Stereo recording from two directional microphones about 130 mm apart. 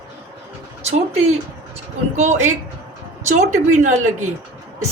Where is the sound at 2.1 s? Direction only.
65° right (ahead or behind).